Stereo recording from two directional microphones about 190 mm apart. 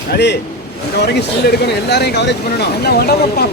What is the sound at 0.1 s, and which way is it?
Speech, 65° left (ahead or behind).